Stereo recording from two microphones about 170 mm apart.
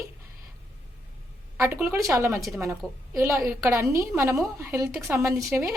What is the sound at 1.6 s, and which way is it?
A woman's voice, 15° right (ahead or behind).